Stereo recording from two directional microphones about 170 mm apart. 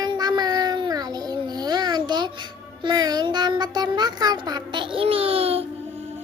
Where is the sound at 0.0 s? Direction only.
25° right (ahead or behind).